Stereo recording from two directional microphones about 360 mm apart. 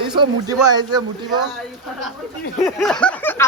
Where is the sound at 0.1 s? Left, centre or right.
Centre.